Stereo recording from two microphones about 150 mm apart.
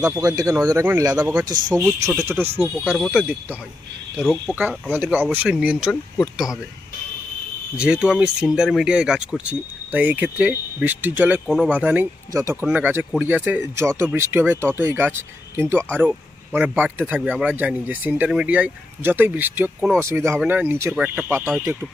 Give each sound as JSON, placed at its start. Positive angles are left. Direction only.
{"t": 0.0, "sound": "speech", "side_deg": -25}
{"t": 2.7, "sound": "speech", "side_deg": 0}
{"t": 4.5, "sound": "speech", "side_deg": -10}
{"t": 7.8, "sound": "speech", "side_deg": -5}